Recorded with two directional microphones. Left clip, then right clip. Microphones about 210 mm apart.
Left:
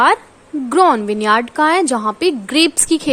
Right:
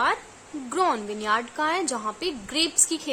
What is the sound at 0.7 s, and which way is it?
A woman's voice, 35° left (ahead or behind).